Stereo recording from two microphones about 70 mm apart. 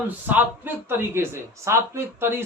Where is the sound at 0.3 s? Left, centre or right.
Right.